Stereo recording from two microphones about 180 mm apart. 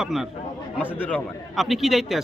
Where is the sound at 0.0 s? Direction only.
Centre (ahead or behind).